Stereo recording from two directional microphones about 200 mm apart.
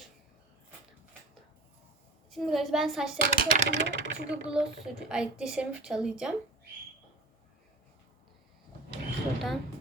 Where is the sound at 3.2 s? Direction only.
50° right (ahead or behind).